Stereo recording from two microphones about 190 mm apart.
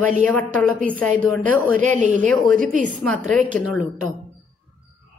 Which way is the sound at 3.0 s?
5° left (ahead or behind).